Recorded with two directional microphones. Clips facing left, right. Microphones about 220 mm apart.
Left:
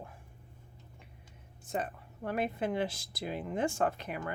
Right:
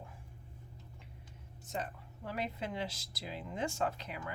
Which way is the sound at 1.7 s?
55° left (ahead or behind).